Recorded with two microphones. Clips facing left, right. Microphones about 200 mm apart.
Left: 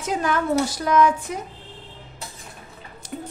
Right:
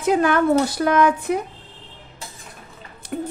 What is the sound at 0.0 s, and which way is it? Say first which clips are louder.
A woman's voice: right 6 dB; 60° right (ahead or behind).